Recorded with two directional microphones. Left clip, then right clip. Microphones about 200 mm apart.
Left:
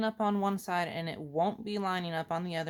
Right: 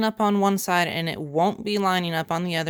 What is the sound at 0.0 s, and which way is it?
Speech, 35° right (ahead or behind).